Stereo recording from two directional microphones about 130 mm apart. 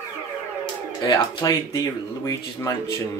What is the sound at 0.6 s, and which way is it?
Speech, 30° left (ahead or behind).